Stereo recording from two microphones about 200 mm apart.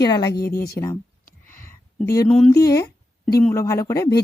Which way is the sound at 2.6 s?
15° left (ahead or behind).